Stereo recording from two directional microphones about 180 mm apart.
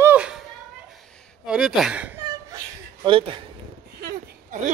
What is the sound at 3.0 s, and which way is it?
Speech, 30° right (ahead or behind).